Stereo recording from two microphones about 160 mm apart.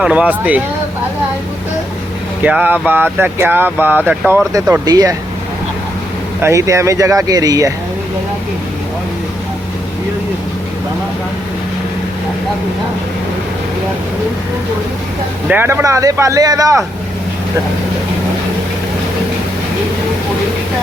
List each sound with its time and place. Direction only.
0.0 s speech: 5° right (ahead or behind)
2.4 s speech: 10° right (ahead or behind)
4.9 s speech: 25° right (ahead or behind)
6.4 s speech: 20° right (ahead or behind)
15.4 s speech: 10° right (ahead or behind)